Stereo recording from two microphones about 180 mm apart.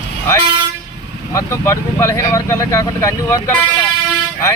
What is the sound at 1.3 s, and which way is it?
Speech, 15° left (ahead or behind).